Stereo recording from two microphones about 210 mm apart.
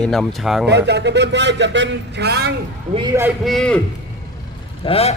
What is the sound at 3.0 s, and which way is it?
Speech, 15° right (ahead or behind).